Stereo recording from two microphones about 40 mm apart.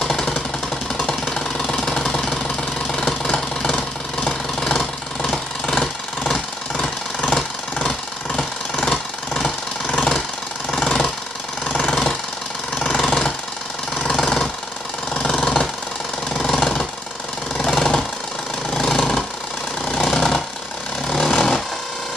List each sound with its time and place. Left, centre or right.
0.0 s engine: centre
3.7 s vehicle: left
4.6 s vehicle: centre
6.3 s engine: left
9.8 s engine: left
12.8 s engine: centre
15.1 s engine: left
16.5 s vehicle: centre
18.8 s engine: centre
21.1 s a sound: centre